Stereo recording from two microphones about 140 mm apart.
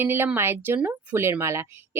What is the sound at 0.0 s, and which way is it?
Speech, 15° right (ahead or behind).